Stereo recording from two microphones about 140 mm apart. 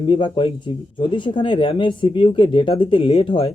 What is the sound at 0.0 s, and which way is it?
Speech, 35° left (ahead or behind).